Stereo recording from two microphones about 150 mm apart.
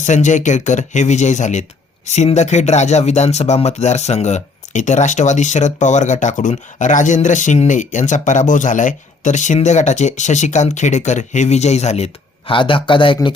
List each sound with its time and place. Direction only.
0.0 s speech: 55° left (ahead or behind); by 13.1 s 35° left (ahead or behind)